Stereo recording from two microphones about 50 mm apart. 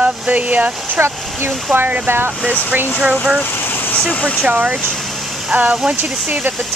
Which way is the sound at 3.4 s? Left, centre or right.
Left.